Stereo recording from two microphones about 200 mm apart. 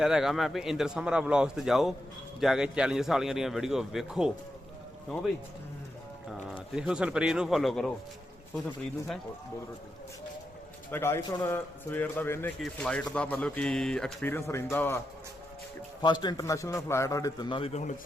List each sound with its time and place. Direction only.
0.0 s a man's voice: centre (ahead or behind)
6.7 s a man's voice: 5° right (ahead or behind)
10.9 s speech: 10° left (ahead or behind)
16.0 s a man's voice: 20° left (ahead or behind)